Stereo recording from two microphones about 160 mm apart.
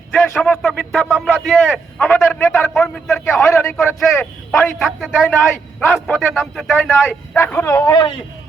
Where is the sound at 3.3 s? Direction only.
20° left (ahead or behind).